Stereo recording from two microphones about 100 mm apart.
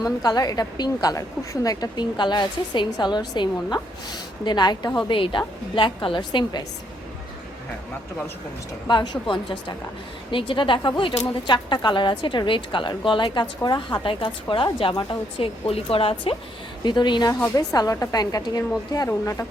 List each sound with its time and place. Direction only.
0.0 s a woman's voice: 40° left (ahead or behind)
8.9 s a woman's voice: 50° left (ahead or behind)
16.8 s a woman's voice: 50° left (ahead or behind); by 19.5 s 30° left (ahead or behind)